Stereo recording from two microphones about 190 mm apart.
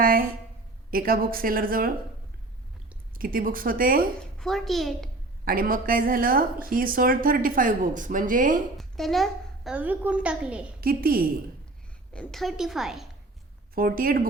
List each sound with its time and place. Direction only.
0.0 s a woman's voice: 50° right (ahead or behind)
3.2 s a woman's voice: 50° right (ahead or behind)
4.4 s a woman's voice: centre (ahead or behind)
5.5 s a woman's voice: 50° right (ahead or behind)
8.8 s a woman's voice: centre (ahead or behind)
10.8 s a woman's voice: 50° right (ahead or behind)
12.1 s a woman's voice: 5° left (ahead or behind)
13.7 s a woman's voice: 50° right (ahead or behind)